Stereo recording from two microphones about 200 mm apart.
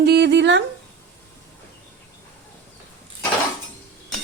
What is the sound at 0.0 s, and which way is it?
Speech, 55° right (ahead or behind).